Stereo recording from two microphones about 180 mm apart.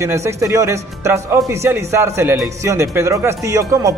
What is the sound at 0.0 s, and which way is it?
A man's voice, 15° right (ahead or behind).